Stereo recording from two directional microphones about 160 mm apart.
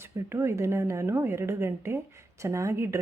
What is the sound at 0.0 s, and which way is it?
A woman's voice, 15° right (ahead or behind).